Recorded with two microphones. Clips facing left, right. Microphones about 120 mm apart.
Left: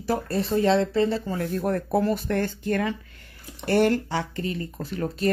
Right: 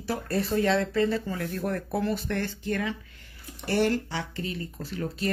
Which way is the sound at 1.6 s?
40° left (ahead or behind).